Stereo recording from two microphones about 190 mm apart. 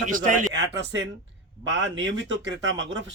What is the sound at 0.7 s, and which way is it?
Speech, 70° right (ahead or behind).